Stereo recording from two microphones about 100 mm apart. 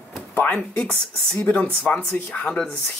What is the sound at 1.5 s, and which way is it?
Speech, 15° left (ahead or behind).